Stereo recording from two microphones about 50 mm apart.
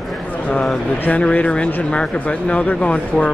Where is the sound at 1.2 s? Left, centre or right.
Left.